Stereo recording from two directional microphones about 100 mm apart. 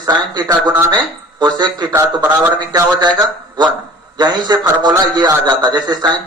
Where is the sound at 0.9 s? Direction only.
45° right (ahead or behind).